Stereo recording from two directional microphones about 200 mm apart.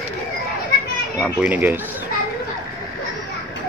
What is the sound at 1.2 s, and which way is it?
Speech, 5° right (ahead or behind).